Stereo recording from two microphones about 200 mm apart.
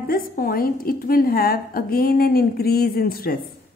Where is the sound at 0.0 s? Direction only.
45° left (ahead or behind).